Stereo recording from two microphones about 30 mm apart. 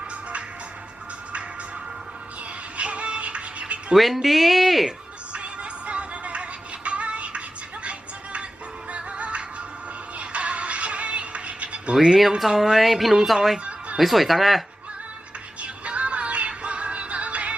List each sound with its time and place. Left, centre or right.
2.7 s music: right
3.9 s speech: centre
5.3 s music: right
12.0 s speech: centre
15.6 s music: right